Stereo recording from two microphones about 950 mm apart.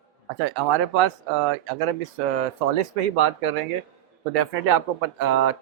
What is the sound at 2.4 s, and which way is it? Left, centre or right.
Speech, right.